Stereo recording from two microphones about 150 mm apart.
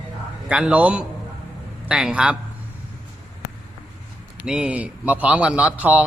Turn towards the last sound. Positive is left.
turn(degrees=-10)  # may be behind; listen again after turning